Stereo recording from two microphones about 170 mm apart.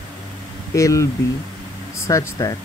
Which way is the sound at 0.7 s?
20° left (ahead or behind).